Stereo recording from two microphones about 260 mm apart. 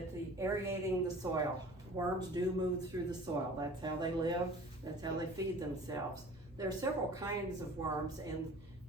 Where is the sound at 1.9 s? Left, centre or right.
Centre.